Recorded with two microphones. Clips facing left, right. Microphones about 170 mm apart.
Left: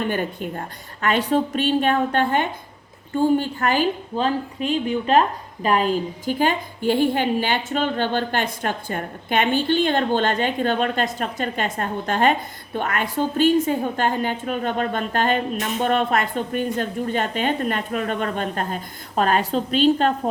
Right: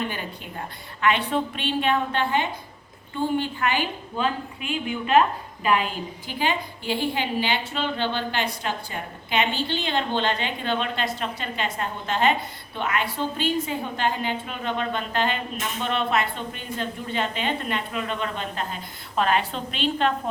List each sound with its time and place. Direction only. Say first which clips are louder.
0.1 s a woman's voice: left 9 dB; 50° left (ahead or behind)